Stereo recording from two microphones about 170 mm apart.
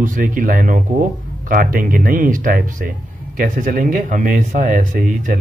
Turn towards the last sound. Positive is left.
turn(degrees=-50)  # may be behind; listen again after turning